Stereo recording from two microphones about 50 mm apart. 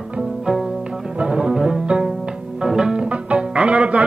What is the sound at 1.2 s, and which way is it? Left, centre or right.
Music, centre.